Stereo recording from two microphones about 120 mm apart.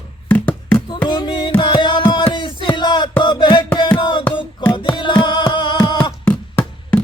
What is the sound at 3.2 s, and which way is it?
Music, 40° left (ahead or behind).